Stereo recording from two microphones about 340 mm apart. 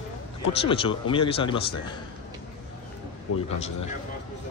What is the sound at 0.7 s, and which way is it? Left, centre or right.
Speech, centre.